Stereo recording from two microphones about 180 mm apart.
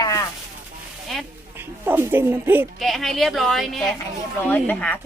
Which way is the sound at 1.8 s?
10° right (ahead or behind).